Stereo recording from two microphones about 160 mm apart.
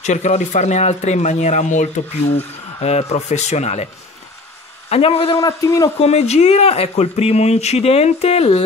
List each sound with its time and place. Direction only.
0.0 s a man's voice: 45° left (ahead or behind)
5.4 s a man's voice: 20° left (ahead or behind)
5.9 s speech: 40° left (ahead or behind)